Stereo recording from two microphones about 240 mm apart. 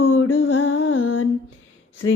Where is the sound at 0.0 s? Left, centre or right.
Left.